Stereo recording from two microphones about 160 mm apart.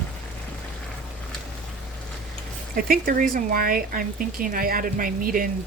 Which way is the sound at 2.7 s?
65° right (ahead or behind).